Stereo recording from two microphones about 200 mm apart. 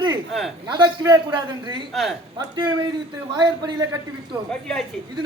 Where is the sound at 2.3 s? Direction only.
20° right (ahead or behind).